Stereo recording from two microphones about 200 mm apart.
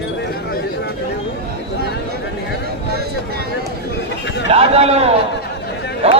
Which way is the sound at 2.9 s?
50° right (ahead or behind).